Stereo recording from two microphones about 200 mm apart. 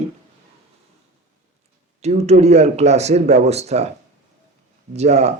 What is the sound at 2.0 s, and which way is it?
Speech, 35° right (ahead or behind).